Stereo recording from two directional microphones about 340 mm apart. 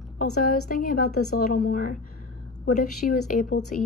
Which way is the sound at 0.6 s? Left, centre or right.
Left.